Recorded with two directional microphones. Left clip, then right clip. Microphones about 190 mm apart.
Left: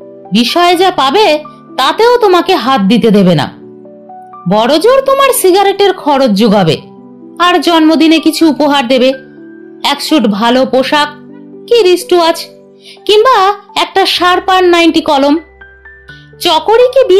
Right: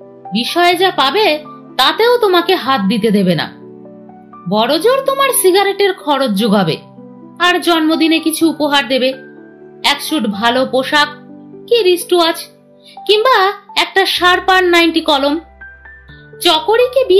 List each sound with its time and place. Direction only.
0.3 s a child's voice: 40° left (ahead or behind)
4.5 s a child's voice: 40° left (ahead or behind)